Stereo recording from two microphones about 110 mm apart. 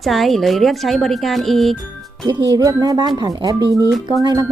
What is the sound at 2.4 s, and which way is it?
Speech, 35° right (ahead or behind).